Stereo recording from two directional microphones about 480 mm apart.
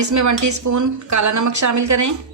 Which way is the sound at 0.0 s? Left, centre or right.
Right.